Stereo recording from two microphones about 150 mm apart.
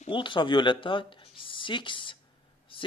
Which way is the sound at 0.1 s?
35° left (ahead or behind).